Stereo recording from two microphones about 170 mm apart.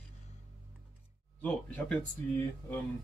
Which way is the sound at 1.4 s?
10° left (ahead or behind).